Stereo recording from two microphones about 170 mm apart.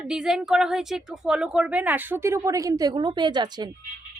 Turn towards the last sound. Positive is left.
turn(degrees=-25)  # may be behind; listen again after turning